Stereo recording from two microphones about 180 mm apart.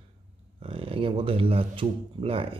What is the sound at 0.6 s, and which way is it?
A man's voice, 30° right (ahead or behind).